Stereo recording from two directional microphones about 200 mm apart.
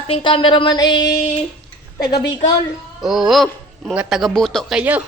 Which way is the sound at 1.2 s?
35° left (ahead or behind).